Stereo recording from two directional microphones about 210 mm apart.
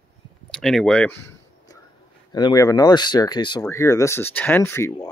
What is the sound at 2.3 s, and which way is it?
Speech, 20° left (ahead or behind).